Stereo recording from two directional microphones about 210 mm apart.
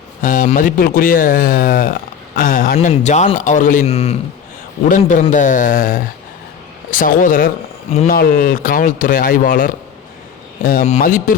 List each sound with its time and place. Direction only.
0.2 s speech: 40° left (ahead or behind)